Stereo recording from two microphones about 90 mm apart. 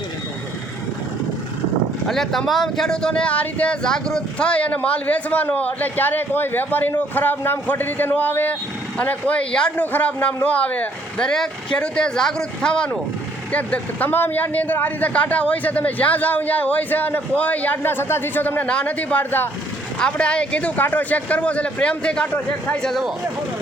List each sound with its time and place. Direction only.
2.0 s a man's voice: 5° left (ahead or behind)
22.8 s speech: centre (ahead or behind)